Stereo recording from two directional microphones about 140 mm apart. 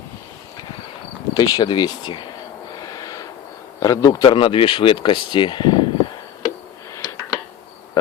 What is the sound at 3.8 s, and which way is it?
Speech, 25° left (ahead or behind).